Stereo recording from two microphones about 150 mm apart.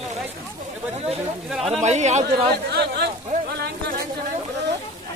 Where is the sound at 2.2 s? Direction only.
90° right.